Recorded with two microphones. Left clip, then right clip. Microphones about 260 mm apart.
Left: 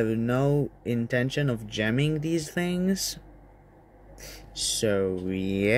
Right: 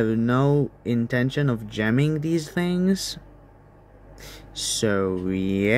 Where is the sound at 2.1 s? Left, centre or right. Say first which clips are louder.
Right 3 dB; right.